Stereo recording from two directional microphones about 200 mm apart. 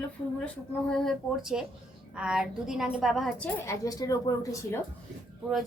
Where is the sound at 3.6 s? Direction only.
15° left (ahead or behind).